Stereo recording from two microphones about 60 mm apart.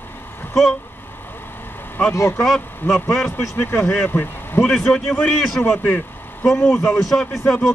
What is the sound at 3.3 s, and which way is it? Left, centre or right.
Speech, left.